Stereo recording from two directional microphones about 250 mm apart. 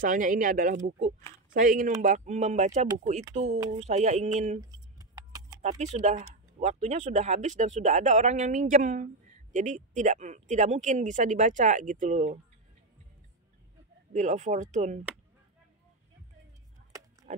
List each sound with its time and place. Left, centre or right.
0.0 s speech: right
4.6 s keys jangling: centre
5.6 s speech: right
14.1 s speech: right
17.3 s pig: right